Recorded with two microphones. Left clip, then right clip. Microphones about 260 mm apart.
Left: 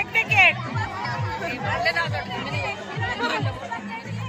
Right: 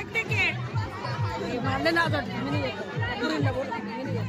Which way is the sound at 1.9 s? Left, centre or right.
Right.